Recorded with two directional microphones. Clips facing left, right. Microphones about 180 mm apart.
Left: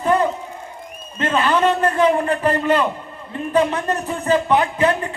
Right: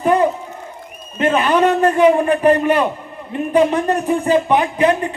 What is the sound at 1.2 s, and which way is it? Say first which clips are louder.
A man's voice: right 3 dB; 15° right (ahead or behind).